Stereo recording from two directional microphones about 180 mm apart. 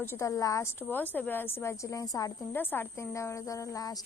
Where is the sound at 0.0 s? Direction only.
15° left (ahead or behind).